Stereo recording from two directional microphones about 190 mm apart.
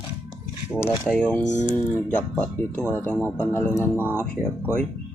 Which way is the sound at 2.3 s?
10° left (ahead or behind).